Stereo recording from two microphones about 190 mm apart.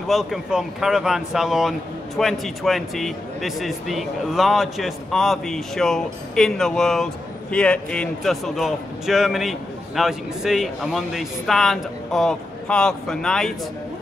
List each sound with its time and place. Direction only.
0.1 s speech: centre (ahead or behind)